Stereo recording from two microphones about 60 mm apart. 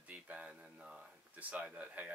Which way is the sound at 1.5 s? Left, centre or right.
Right.